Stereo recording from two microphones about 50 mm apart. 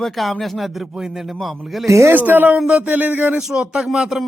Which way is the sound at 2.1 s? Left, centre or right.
Right.